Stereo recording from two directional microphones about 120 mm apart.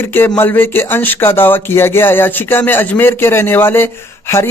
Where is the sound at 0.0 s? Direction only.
15° left (ahead or behind).